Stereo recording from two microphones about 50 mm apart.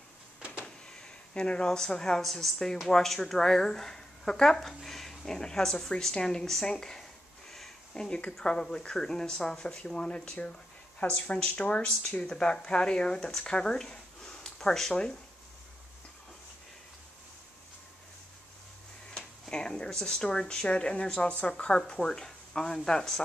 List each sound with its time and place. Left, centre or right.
1.3 s speech: left
19.5 s speech: centre